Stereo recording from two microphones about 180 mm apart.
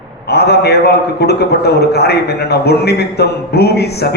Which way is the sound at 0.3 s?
65° left (ahead or behind).